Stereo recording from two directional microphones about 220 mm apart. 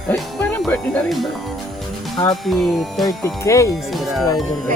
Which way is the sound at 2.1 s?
15° left (ahead or behind).